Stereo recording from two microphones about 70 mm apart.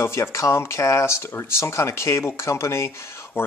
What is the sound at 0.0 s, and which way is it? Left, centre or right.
Speech, left.